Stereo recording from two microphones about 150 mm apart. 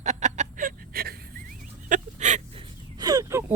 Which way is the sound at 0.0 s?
50° right (ahead or behind).